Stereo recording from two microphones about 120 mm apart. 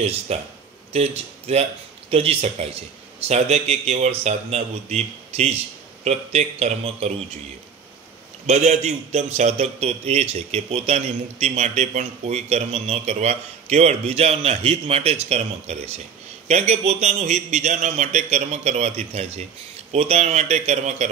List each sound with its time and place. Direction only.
0.0 s a man's voice: 60° right (ahead or behind)
8.5 s a man's voice: 65° right (ahead or behind)